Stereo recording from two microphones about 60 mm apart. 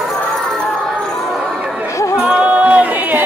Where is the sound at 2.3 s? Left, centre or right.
Right.